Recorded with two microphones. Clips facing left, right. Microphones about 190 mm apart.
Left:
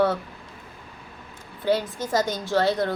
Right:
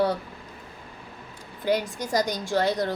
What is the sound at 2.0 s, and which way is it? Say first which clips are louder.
Speech: left 1 dB; 15° right (ahead or behind).